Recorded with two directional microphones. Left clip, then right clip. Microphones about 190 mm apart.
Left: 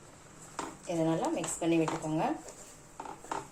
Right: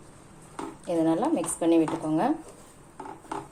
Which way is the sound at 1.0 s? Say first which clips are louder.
Right 6 dB; 45° right (ahead or behind).